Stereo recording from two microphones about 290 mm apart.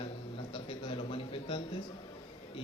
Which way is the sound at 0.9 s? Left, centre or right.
Centre.